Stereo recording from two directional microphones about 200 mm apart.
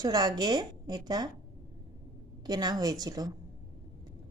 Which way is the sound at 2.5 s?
20° right (ahead or behind).